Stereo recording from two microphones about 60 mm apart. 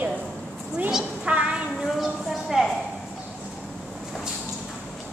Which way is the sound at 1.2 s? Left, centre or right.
Right.